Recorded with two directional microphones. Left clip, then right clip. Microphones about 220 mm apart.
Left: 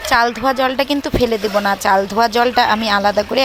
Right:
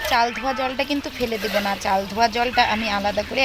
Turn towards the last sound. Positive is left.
turn(degrees=20)  # may be behind; listen again after turning